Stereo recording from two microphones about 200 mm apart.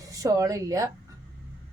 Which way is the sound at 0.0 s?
15° right (ahead or behind).